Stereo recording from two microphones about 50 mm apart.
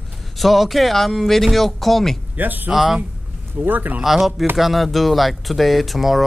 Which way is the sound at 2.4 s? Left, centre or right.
Right.